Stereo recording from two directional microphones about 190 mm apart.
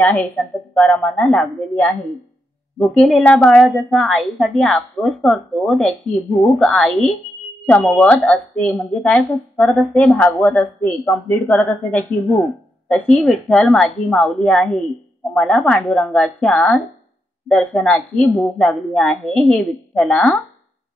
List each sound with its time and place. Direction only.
0.0 s a woman's voice: 10° left (ahead or behind)